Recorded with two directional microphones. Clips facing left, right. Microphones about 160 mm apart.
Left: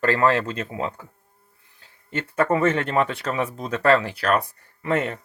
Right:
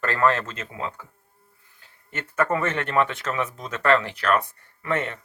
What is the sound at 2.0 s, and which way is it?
Speech, 25° left (ahead or behind).